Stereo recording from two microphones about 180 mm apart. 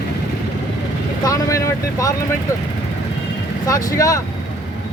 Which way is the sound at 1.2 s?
20° left (ahead or behind).